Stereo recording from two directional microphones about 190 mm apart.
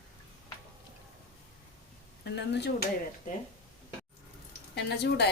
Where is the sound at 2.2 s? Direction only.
65° left (ahead or behind).